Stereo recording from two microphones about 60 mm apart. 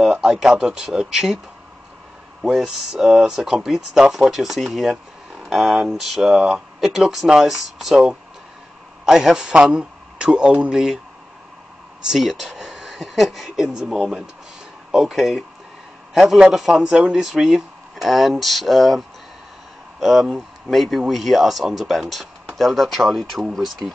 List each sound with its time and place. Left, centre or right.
0.0 s speech: centre
2.4 s a man's voice: centre
12.1 s speech: centre